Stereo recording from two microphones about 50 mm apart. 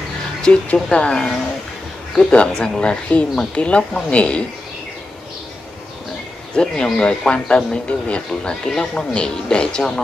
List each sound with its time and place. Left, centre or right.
0.4 s speech: left
6.5 s speech: centre